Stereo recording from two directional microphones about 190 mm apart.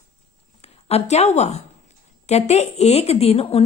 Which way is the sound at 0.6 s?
30° left (ahead or behind).